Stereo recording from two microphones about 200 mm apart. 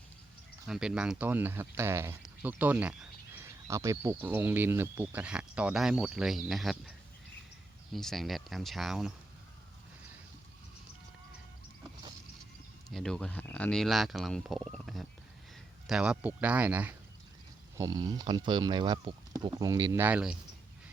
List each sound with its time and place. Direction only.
0.7 s speech: 5° right (ahead or behind)
7.9 s speech: centre (ahead or behind)
12.9 s speech: 5° left (ahead or behind)
14.7 s a sound: centre (ahead or behind)
15.9 s speech: 5° right (ahead or behind)
17.7 s speech: 20° right (ahead or behind)